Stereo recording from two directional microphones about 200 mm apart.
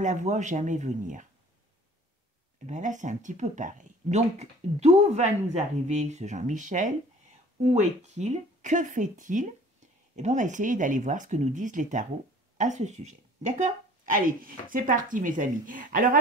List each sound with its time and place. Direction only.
0.0 s speech: 35° right (ahead or behind)
2.6 s speech: 40° right (ahead or behind)